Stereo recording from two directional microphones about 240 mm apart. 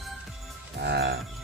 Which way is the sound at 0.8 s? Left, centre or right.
Right.